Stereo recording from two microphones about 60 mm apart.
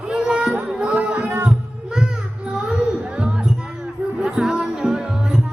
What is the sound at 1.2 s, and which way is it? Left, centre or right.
Music, right.